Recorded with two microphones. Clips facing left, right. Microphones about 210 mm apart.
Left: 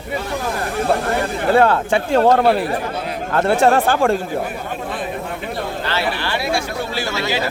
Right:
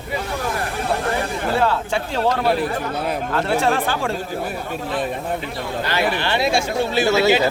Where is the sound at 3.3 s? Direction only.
45° left (ahead or behind).